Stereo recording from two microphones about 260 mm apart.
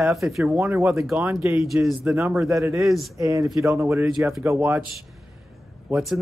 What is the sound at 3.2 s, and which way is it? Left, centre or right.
Speech, centre.